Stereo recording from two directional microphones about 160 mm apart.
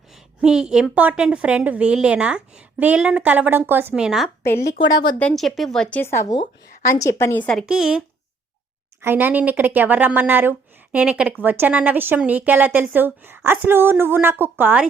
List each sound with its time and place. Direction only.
0.1 s a woman's voice: 5° right (ahead or behind)
4.6 s a woman's voice: 25° left (ahead or behind)
5.2 s a woman's voice: centre (ahead or behind)
7.7 s a woman's voice: 5° right (ahead or behind)